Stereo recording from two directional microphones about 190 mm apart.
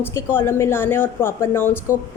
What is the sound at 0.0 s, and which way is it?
A woman's voice, 10° left (ahead or behind).